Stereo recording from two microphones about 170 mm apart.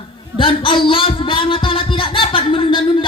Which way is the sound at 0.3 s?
30° left (ahead or behind).